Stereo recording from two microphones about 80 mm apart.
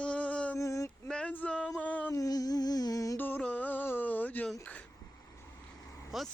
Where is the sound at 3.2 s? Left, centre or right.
Left.